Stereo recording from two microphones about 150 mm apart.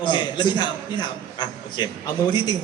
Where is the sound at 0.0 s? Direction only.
30° left (ahead or behind).